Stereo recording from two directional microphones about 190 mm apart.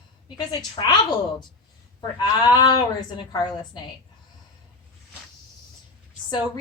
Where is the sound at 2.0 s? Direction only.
25° left (ahead or behind).